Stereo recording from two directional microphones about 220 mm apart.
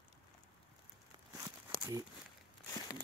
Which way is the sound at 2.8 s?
20° left (ahead or behind).